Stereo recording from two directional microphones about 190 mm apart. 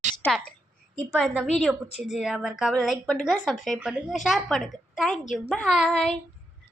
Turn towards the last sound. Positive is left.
turn(degrees=0)  # may be behind; listen again after turning